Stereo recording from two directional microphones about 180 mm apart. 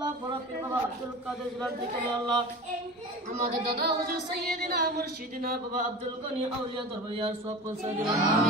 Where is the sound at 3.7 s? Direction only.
60° right (ahead or behind).